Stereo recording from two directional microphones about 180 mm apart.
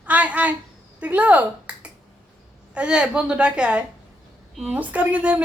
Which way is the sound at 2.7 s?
5° right (ahead or behind).